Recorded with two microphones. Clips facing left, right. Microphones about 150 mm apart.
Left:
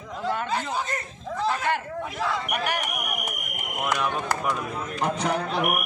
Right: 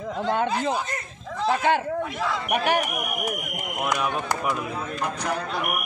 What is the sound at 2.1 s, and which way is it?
Speech, centre (ahead or behind).